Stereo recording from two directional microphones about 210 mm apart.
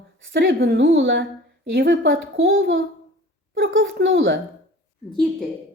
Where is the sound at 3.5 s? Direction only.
65° right (ahead or behind).